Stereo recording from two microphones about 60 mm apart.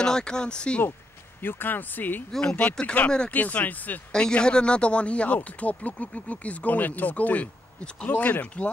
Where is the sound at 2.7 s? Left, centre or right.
Centre.